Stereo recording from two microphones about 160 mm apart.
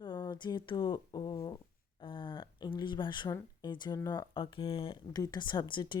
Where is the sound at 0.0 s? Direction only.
25° left (ahead or behind).